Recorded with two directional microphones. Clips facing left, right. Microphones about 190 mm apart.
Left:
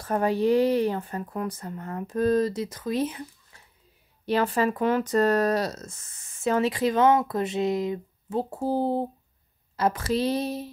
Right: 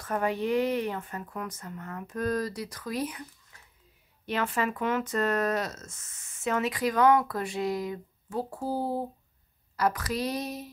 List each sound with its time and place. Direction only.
0.0 s speech: 35° left (ahead or behind)
3.5 s a sound: 30° left (ahead or behind)
4.3 s speech: 35° left (ahead or behind)